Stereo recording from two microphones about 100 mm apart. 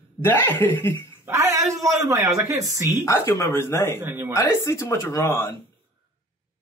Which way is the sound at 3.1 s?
25° left (ahead or behind).